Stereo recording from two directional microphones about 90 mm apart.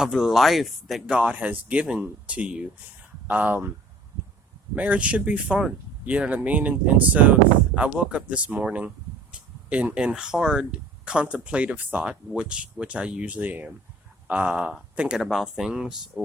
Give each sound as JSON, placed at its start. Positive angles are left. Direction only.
{"t": 0.0, "sound": "speech", "side_deg": -5}
{"t": 4.7, "sound": "speech", "side_deg": -15}